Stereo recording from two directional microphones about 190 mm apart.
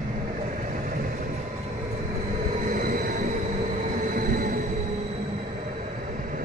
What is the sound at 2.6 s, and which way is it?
Vehicle, 45° right (ahead or behind).